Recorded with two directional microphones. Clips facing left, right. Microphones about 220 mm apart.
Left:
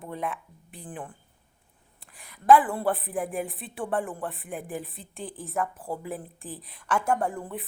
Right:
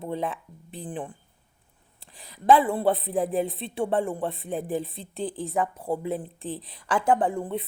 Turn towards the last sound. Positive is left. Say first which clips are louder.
# right 4 dB
turn(degrees=-20)  # may be behind; listen again after turning